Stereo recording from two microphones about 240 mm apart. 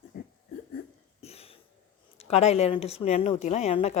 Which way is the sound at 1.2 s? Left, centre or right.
Left.